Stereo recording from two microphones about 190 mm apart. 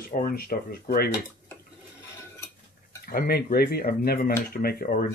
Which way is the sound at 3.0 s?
55° left (ahead or behind).